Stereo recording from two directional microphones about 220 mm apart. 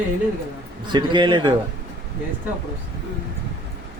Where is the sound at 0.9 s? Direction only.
20° right (ahead or behind).